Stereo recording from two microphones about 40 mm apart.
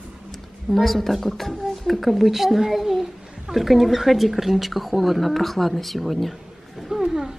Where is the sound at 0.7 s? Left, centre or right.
Centre.